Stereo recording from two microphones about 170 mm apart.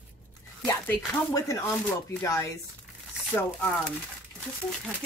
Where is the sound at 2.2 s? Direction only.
20° left (ahead or behind).